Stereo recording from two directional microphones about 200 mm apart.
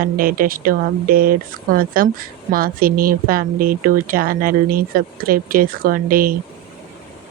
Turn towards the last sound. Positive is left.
turn(degrees=-45)  # may be behind; listen again after turning